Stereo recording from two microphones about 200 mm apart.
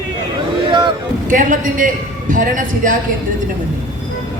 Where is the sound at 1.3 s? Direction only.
40° right (ahead or behind).